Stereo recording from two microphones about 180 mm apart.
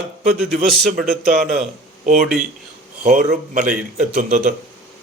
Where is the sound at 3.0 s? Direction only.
45° right (ahead or behind).